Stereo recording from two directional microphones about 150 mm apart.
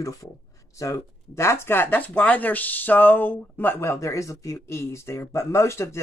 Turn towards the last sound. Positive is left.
turn(degrees=20)  # may be behind; listen again after turning